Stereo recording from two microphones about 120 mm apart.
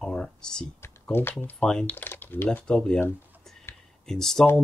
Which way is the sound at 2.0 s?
15° left (ahead or behind).